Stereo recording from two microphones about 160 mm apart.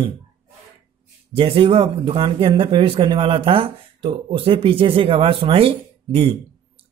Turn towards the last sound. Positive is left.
turn(degrees=-35)  # may be behind; listen again after turning